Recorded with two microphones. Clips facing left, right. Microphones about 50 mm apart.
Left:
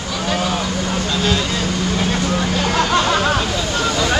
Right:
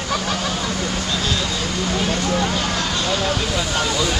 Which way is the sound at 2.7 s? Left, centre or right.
Left.